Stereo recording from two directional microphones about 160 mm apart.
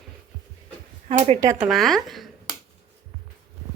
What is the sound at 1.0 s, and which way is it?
Speech, 45° right (ahead or behind).